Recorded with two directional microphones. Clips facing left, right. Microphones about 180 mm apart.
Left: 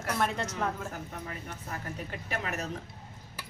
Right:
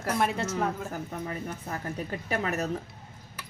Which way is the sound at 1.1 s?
40° right (ahead or behind).